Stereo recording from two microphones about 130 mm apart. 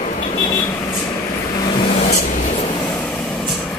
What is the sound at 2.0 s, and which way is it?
Vehicle, 60° left (ahead or behind).